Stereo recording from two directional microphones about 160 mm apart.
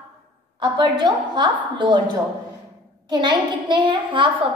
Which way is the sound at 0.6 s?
30° right (ahead or behind).